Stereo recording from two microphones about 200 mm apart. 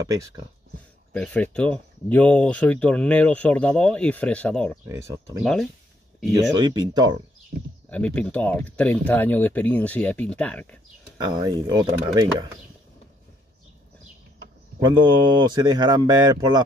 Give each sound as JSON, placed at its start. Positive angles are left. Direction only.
{"t": 1.1, "sound": "speech", "side_deg": 5}
{"t": 4.8, "sound": "speech", "side_deg": -15}
{"t": 5.4, "sound": "speech", "side_deg": 0}
{"t": 6.3, "sound": "speech", "side_deg": -20}
{"t": 7.9, "sound": "speech", "side_deg": 5}
{"t": 11.1, "sound": "speech", "side_deg": -20}
{"t": 14.8, "sound": "speech", "side_deg": -25}